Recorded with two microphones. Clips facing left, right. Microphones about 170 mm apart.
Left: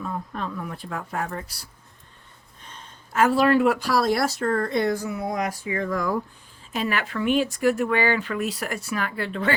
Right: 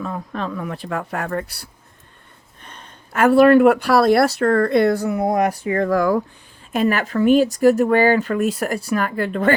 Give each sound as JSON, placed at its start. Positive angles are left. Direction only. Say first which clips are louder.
{"t": 0.0, "sound": "speech", "louder": "right 4 dB", "side_deg": -90}
{"t": 2.6, "sound": "speech", "louder": "right 3 dB", "side_deg": -60}
{"t": 6.7, "sound": "speech", "louder": "right 8 dB", "side_deg": -45}